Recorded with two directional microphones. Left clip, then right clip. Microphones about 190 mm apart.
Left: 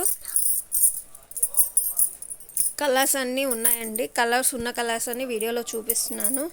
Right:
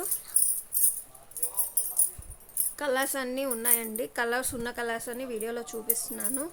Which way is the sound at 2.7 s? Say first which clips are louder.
Left 6 dB; 20° left (ahead or behind).